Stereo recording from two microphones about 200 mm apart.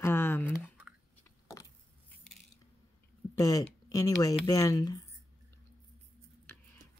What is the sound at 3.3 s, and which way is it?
Speech, 20° left (ahead or behind).